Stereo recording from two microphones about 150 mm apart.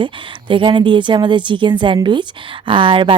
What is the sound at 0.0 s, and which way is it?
Speech, 35° right (ahead or behind).